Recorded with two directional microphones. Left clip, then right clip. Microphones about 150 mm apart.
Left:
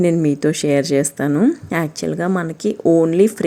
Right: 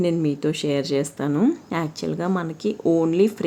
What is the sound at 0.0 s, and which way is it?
A woman's voice, 25° left (ahead or behind).